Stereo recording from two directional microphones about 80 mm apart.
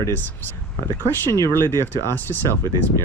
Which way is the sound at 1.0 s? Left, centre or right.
Left.